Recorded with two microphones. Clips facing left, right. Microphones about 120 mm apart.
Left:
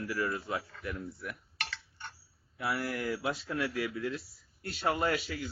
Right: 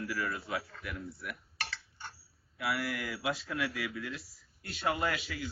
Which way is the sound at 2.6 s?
30° left (ahead or behind).